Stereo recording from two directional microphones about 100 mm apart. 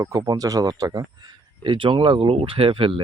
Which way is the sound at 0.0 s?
35° right (ahead or behind).